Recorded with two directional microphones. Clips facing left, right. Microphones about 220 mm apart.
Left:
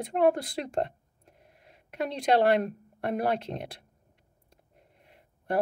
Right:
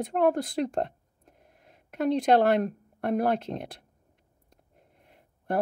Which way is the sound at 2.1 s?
50° right (ahead or behind).